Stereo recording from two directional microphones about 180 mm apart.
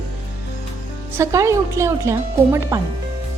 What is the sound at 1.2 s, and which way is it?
Speech, 15° right (ahead or behind).